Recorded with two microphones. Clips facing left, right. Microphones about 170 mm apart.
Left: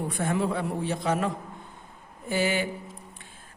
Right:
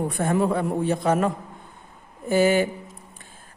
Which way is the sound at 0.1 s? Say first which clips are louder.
Right 3 dB; 45° right (ahead or behind).